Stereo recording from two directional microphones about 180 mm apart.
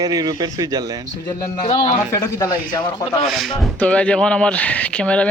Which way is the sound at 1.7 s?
25° left (ahead or behind).